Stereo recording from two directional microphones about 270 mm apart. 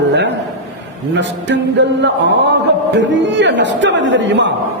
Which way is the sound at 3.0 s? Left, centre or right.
Right.